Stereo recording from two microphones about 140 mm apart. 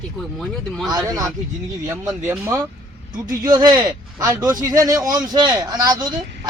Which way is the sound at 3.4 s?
30° right (ahead or behind).